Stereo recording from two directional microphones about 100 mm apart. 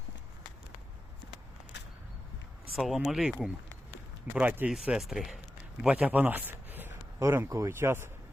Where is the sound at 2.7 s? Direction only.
Centre (ahead or behind).